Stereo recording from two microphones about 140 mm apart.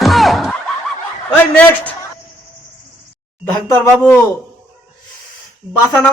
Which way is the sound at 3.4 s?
15° left (ahead or behind).